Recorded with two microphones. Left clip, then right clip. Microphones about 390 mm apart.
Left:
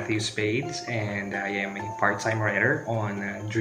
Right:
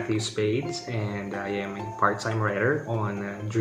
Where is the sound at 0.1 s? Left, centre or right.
Right.